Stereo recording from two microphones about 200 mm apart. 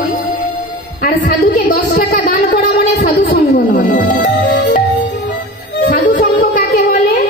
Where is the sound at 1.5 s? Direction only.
55° left (ahead or behind).